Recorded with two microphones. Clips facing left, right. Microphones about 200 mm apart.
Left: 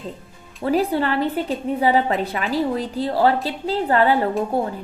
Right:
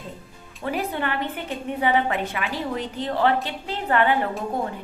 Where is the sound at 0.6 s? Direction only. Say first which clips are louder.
Left 7 dB; 35° left (ahead or behind).